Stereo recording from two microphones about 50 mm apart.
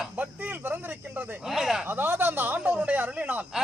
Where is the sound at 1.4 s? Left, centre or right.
Centre.